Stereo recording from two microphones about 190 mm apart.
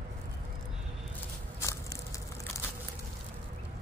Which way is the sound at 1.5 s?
15° left (ahead or behind).